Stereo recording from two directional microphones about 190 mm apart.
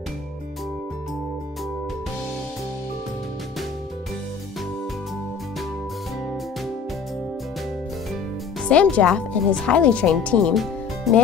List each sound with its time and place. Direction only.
8.6 s speech: 5° left (ahead or behind)